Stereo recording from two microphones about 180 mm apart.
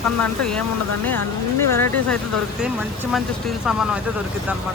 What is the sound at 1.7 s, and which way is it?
Speech, 10° left (ahead or behind).